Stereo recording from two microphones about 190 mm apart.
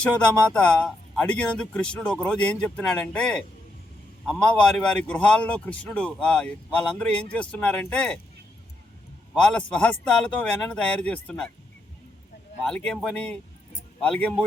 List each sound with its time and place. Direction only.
0.5 s a man's voice: 5° left (ahead or behind)
9.3 s a man's voice: 5° left (ahead or behind)
12.6 s a man's voice: 5° left (ahead or behind)